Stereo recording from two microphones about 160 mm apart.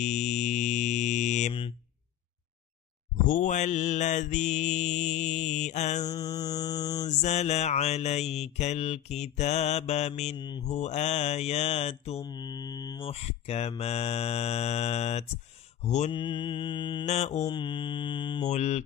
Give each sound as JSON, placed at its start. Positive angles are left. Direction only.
{"t": 0.0, "sound": "mantra", "side_deg": 45}
{"t": 3.3, "sound": "mantra", "side_deg": 55}
{"t": 6.0, "sound": "mantra", "side_deg": 25}
{"t": 7.1, "sound": "mantra", "side_deg": 45}
{"t": 10.3, "sound": "mantra", "side_deg": 25}
{"t": 10.6, "sound": "mantra", "side_deg": 45}
{"t": 12.2, "sound": "mantra", "side_deg": 25}
{"t": 13.1, "sound": "mantra", "side_deg": 40}
{"t": 16.1, "sound": "mantra", "side_deg": 30}
{"t": 17.0, "sound": "mantra", "side_deg": 45}
{"t": 17.5, "sound": "mantra", "side_deg": 30}
{"t": 18.4, "sound": "mantra", "side_deg": 45}